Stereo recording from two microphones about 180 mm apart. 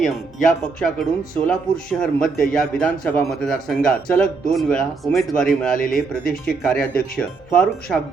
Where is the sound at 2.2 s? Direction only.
50° left (ahead or behind).